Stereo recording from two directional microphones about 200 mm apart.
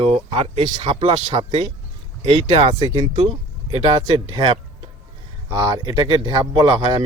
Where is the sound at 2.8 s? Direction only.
15° right (ahead or behind).